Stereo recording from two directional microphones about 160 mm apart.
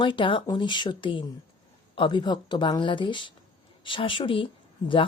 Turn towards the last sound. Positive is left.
turn(degrees=35)  # may be behind; listen again after turning